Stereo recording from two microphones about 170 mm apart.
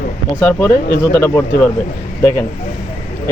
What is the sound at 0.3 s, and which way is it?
Speech, 10° left (ahead or behind).